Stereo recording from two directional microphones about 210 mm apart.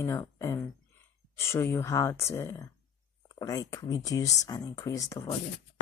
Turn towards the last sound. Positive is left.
turn(degrees=15)  # may be behind; listen again after turning